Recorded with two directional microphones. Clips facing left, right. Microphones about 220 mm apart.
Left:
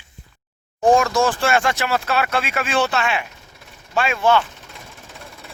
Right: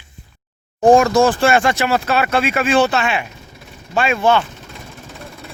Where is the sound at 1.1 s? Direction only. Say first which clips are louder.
Right 5 dB; 25° right (ahead or behind).